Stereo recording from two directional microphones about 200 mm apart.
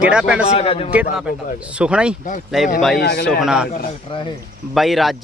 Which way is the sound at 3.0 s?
60° left (ahead or behind).